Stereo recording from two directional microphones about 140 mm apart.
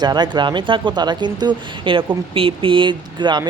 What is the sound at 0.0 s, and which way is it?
Speech, 30° right (ahead or behind).